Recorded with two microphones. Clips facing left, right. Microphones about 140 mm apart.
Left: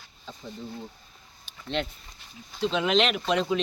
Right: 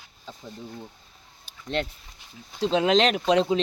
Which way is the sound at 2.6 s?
35° right (ahead or behind).